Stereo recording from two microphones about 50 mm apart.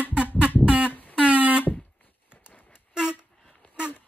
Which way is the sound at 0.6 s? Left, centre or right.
Right.